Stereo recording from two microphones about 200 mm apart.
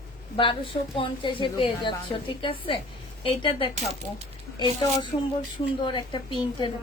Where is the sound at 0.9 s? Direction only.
25° left (ahead or behind).